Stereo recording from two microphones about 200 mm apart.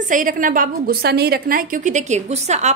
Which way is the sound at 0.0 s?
40° right (ahead or behind).